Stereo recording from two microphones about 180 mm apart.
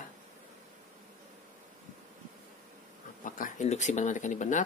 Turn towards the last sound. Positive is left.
turn(degrees=45)  # may be behind; listen again after turning